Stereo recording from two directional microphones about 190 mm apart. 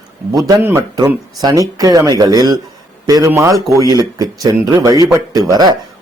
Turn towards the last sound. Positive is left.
turn(degrees=-20)  # may be behind; listen again after turning